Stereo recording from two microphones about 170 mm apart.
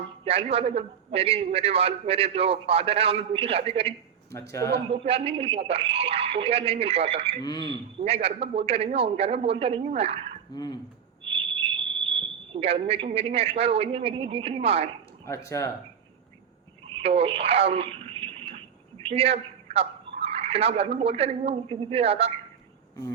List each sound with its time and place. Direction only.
0.3 s a man's voice: 35° right (ahead or behind)
4.3 s speech: 15° left (ahead or behind)
4.9 s a man's voice: 35° right (ahead or behind)
7.3 s speech: 25° left (ahead or behind)
7.7 s a man's voice: 35° right (ahead or behind)
10.5 s speech: 25° left (ahead or behind)
11.3 s a sound: 30° right (ahead or behind)
12.1 s a man's voice: 35° right (ahead or behind)
15.4 s speech: 15° left (ahead or behind)
16.8 s a sound: 35° right (ahead or behind)
19.0 s a woman's voice: 35° right (ahead or behind)